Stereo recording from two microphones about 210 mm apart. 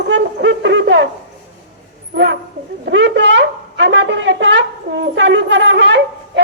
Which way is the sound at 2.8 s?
55° right (ahead or behind).